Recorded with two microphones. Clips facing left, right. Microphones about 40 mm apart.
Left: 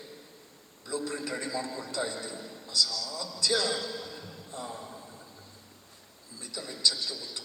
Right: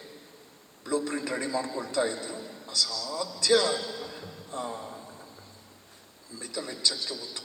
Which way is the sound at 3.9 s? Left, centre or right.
Centre.